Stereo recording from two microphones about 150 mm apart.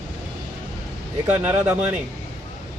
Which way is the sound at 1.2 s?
10° right (ahead or behind).